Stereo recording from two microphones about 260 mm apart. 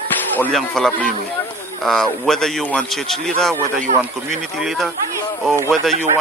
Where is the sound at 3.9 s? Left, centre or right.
Right.